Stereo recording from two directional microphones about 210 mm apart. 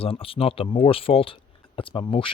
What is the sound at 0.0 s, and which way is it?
Speech, 25° left (ahead or behind).